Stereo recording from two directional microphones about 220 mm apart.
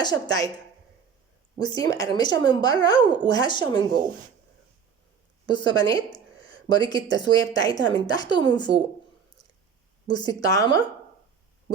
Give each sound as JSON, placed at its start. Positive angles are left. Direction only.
{"t": 0.0, "sound": "speech", "side_deg": 20}
{"t": 1.5, "sound": "speech", "side_deg": 20}
{"t": 5.5, "sound": "speech", "side_deg": 20}
{"t": 10.1, "sound": "speech", "side_deg": 20}